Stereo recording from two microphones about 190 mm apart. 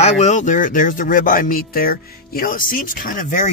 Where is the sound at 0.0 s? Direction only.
40° left (ahead or behind).